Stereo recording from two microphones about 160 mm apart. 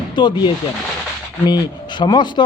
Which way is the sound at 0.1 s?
30° left (ahead or behind).